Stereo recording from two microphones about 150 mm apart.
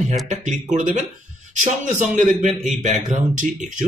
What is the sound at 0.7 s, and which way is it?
A man's voice, 55° right (ahead or behind).